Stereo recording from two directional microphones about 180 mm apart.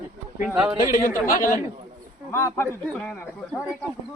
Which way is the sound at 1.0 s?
50° left (ahead or behind).